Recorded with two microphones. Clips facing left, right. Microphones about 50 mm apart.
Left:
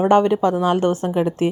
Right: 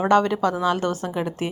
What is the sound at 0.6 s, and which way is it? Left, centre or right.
Speech, left.